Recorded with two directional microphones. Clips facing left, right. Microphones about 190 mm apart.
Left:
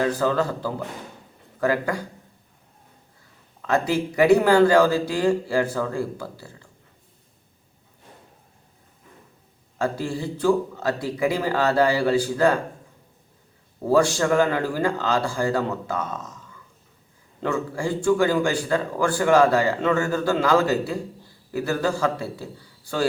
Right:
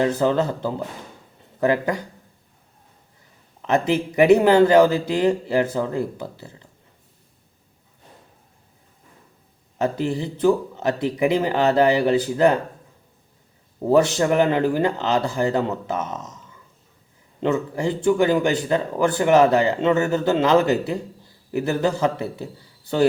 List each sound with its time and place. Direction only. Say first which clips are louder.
0.0 s a man's voice: right 3 dB; 20° right (ahead or behind)
3.6 s a man's voice: right 2 dB; 20° right (ahead or behind)
9.7 s a man's voice: right 3 dB; 20° right (ahead or behind)
13.8 s a man's voice: right 2 dB; 20° right (ahead or behind)